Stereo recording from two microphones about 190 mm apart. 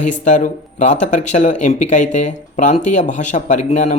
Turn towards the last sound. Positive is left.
turn(degrees=40)  # may be behind; listen again after turning